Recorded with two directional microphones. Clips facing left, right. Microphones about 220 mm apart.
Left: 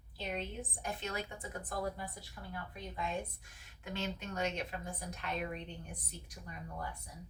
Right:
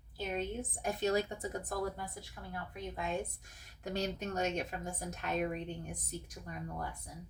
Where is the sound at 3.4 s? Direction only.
40° right (ahead or behind).